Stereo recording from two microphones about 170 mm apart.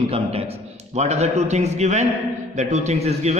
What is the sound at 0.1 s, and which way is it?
A man's voice, 35° right (ahead or behind).